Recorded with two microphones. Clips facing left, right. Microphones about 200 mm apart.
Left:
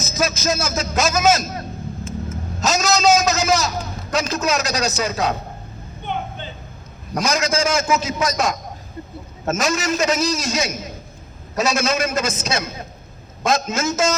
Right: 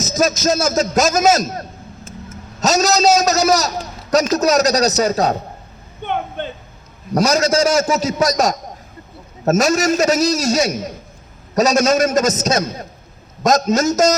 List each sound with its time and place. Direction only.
0.1 s music: 40° right (ahead or behind)
0.4 s a man's voice: 40° right (ahead or behind)
6.1 s a sound: 60° right (ahead or behind)
7.1 s a man's voice: 40° right (ahead or behind)